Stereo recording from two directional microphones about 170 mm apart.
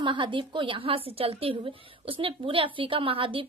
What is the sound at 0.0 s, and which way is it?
A woman's voice, 30° right (ahead or behind).